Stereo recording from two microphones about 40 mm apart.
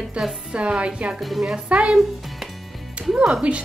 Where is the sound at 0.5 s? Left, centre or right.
Right.